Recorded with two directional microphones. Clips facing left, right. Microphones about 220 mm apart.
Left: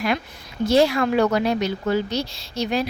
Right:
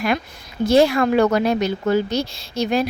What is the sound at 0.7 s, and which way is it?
A woman's voice, 50° right (ahead or behind).